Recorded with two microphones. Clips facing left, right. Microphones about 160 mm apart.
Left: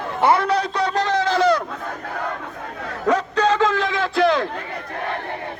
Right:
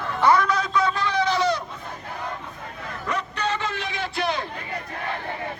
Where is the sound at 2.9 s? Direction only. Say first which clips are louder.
Left 9 dB; 90° left.